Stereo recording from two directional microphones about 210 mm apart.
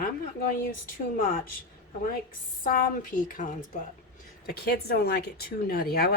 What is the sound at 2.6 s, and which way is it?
Speech, 40° left (ahead or behind).